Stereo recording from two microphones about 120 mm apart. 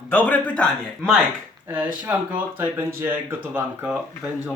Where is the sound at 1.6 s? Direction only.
15° right (ahead or behind).